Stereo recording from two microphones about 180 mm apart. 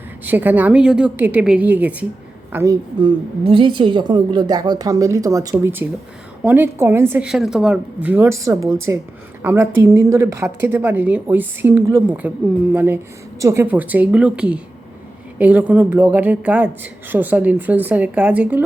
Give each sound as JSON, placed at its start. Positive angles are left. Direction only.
{"t": 0.3, "sound": "a woman's voice", "side_deg": -10}
{"t": 3.0, "sound": "a woman's voice", "side_deg": -25}